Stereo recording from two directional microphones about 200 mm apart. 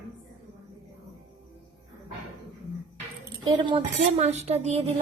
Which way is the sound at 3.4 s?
25° right (ahead or behind).